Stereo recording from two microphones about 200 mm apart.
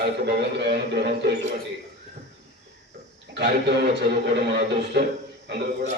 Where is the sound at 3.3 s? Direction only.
55° right (ahead or behind).